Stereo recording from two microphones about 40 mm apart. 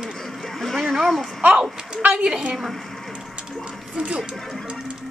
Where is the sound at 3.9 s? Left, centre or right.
Right.